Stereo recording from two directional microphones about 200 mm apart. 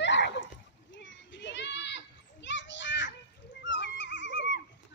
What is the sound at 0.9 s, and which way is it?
Children playing, 65° left (ahead or behind).